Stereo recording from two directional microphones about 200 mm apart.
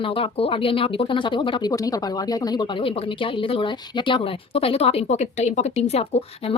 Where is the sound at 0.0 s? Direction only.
25° left (ahead or behind).